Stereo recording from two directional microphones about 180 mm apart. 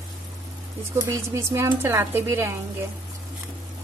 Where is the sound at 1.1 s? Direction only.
15° right (ahead or behind).